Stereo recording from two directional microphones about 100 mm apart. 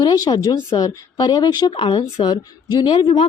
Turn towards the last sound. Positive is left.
turn(degrees=50)  # may be behind; listen again after turning